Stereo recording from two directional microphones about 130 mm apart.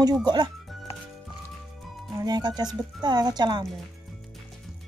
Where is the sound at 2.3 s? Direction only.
30° right (ahead or behind).